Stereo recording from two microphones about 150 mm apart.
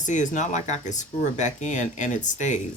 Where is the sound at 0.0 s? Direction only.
55° left (ahead or behind).